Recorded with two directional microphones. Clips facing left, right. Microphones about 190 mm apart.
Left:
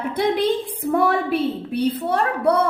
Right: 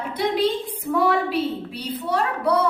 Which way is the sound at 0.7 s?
55° left (ahead or behind).